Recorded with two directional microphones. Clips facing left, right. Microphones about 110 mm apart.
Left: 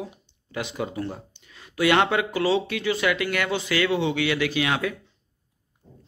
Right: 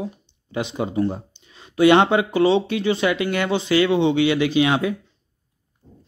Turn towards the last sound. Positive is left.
turn(degrees=-25)  # may be behind; listen again after turning